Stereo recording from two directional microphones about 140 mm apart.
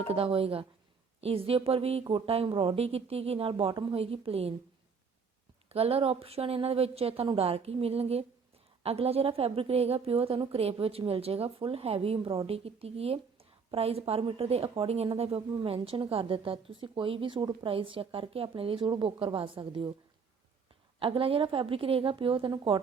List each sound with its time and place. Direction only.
0.1 s a woman's voice: 45° right (ahead or behind)
5.6 s a woman's voice: 45° right (ahead or behind)
21.0 s speech: 40° right (ahead or behind)